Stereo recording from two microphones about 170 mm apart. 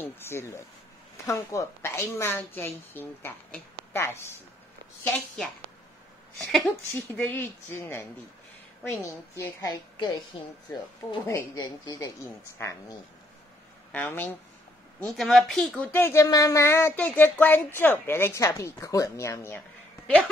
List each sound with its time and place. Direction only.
0.0 s speech: 15° left (ahead or behind)
6.3 s speech: 5° left (ahead or behind)
11.2 s speech: 20° left (ahead or behind)
13.9 s speech: 10° left (ahead or behind)